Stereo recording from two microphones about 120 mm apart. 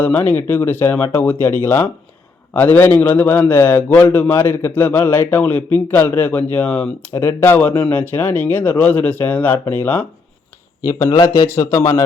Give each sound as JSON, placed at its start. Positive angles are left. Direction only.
{"t": 0.0, "sound": "a man's voice", "side_deg": 15}
{"t": 10.8, "sound": "speech", "side_deg": 30}